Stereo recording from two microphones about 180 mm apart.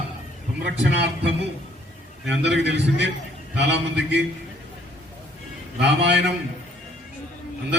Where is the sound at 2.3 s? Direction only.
75° right (ahead or behind).